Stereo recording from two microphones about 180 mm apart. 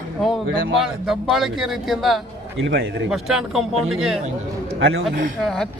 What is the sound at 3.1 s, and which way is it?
Speech, centre (ahead or behind).